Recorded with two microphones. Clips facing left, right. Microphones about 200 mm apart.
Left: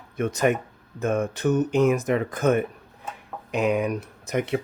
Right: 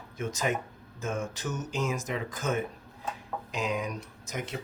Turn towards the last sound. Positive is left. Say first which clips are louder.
# left 11 dB
turn(degrees=60)  # may be behind; listen again after turning